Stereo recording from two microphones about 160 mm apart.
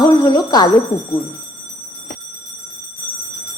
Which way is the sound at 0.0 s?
25° left (ahead or behind).